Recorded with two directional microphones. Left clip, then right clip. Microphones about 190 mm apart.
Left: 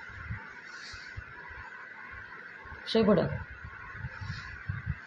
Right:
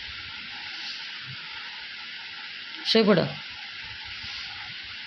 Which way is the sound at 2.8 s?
15° right (ahead or behind).